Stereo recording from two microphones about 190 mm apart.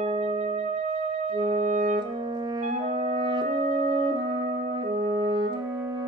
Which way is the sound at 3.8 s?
25° right (ahead or behind).